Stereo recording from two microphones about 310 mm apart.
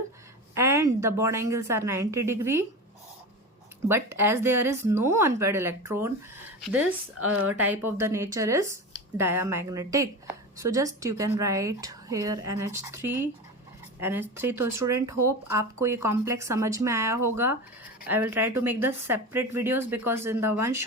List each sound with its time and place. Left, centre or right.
0.5 s speech: centre
3.8 s speech: centre
7.4 s speech: centre